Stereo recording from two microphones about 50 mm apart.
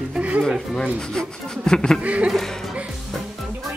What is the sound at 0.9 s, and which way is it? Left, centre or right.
Speech, centre.